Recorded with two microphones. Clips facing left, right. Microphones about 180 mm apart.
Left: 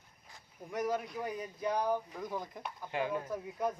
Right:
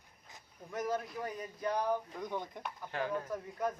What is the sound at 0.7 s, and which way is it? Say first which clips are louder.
Speech: left 2 dB; 15° left (ahead or behind).